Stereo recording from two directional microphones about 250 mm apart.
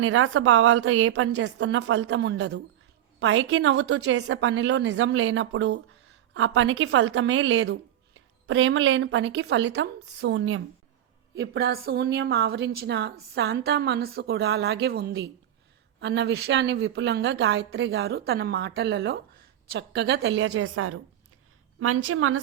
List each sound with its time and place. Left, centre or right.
0.0 s a woman's voice: right
11.3 s a woman's voice: right